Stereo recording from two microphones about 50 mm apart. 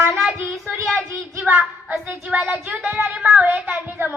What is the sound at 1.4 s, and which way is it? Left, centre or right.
A woman's voice, right.